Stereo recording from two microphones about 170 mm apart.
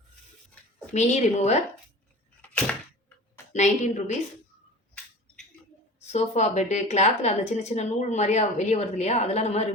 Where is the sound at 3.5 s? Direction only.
45° left (ahead or behind).